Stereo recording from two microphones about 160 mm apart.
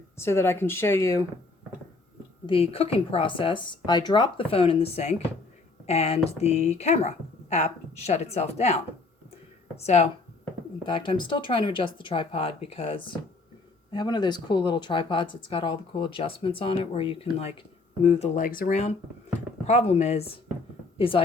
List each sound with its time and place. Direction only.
0.2 s speech: 15° left (ahead or behind)
2.5 s speech: 35° left (ahead or behind)
10.8 s speech: 30° left (ahead or behind)
18.4 s speech: 60° left (ahead or behind); by 20.3 s 40° left (ahead or behind)